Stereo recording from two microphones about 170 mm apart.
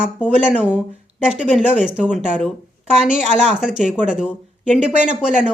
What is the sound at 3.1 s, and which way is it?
Speech, 40° right (ahead or behind).